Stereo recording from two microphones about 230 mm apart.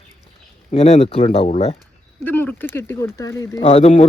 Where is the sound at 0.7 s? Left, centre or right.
Left.